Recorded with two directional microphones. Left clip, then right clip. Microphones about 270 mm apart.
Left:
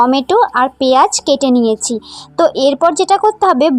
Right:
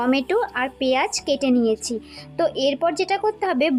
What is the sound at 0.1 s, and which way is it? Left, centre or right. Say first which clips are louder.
Speech: left 10 dB; centre.